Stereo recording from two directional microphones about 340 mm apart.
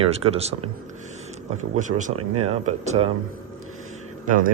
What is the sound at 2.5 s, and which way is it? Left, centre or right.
Speech, centre.